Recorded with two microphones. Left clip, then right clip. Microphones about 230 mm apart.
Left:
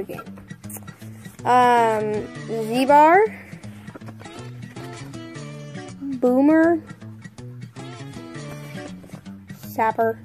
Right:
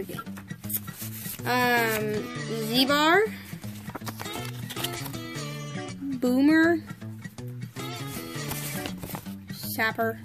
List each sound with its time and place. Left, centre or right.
1.4 s speech: right
2.1 s speech: centre
3.1 s speech: right
4.9 s music: centre
6.3 s speech: right
8.4 s music: centre
9.8 s speech: right